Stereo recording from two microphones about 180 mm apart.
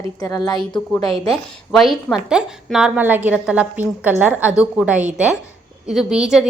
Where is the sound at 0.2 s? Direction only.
20° left (ahead or behind).